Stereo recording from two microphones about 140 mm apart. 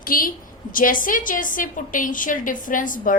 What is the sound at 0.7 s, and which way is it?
A woman's voice, 80° left.